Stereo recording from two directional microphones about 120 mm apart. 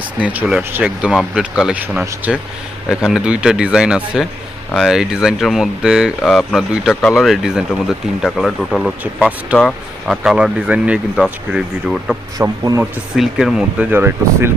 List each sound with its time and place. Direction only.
0.2 s speech: 10° right (ahead or behind)
12.4 s speech: 30° right (ahead or behind)
13.1 s speech: 5° right (ahead or behind)
13.9 s speech: 20° right (ahead or behind)